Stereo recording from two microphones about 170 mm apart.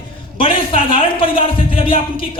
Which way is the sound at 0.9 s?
30° left (ahead or behind).